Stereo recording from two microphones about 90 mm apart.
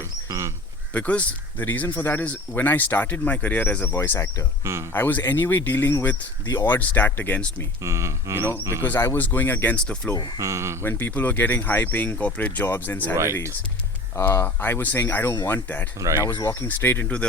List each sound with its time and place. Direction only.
0.0 s a sound: 30° right (ahead or behind)
0.9 s speech: 15° left (ahead or behind)
4.6 s speech: 30° right (ahead or behind)
4.9 s speech: 20° left (ahead or behind)
7.8 s speech: 30° right (ahead or behind)
9.1 s speech: 20° left (ahead or behind)
9.8 s speech: 10° left (ahead or behind)
10.3 s speech: 30° right (ahead or behind)
10.8 s speech: 25° left (ahead or behind)
14.2 s speech: 30° left (ahead or behind)
14.4 s speech: 20° left (ahead or behind)
16.4 s speech: 40° left (ahead or behind)
16.6 s speech: 20° left (ahead or behind)